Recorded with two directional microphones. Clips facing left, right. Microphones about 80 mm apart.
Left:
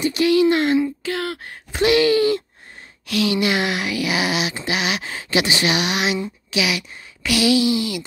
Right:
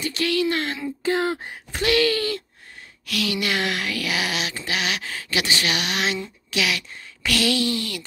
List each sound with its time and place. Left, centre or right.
0.0 s speech: centre
1.0 s speech: right
1.8 s speech: centre
3.1 s a sound: left